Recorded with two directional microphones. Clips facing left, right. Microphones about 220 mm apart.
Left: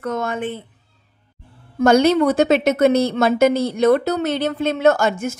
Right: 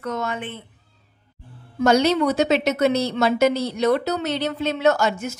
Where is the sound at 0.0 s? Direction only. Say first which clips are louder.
Left 4 dB; 50° left (ahead or behind).